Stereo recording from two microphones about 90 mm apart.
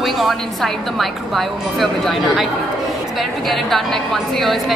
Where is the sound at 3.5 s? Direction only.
Centre (ahead or behind).